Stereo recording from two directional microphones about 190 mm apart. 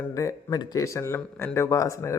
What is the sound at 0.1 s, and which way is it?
Speech, 15° left (ahead or behind).